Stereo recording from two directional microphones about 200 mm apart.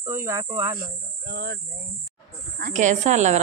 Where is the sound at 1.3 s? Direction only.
50° right (ahead or behind).